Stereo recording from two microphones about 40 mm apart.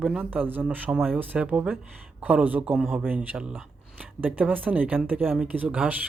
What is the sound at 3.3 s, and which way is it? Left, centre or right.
Speech, right.